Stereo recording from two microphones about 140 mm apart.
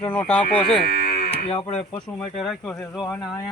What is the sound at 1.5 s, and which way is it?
Speech, 45° left (ahead or behind).